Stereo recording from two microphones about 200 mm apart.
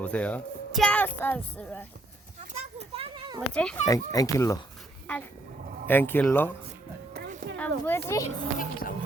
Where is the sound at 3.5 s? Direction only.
5° left (ahead or behind).